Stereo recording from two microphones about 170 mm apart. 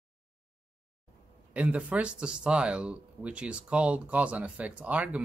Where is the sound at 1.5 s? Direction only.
10° right (ahead or behind).